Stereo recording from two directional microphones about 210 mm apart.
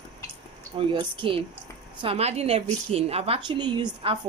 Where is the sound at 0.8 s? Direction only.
25° right (ahead or behind).